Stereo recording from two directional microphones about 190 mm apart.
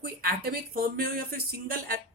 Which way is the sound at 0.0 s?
55° right (ahead or behind).